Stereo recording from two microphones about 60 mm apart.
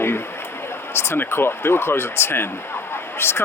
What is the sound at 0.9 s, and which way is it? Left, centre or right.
Speech, left.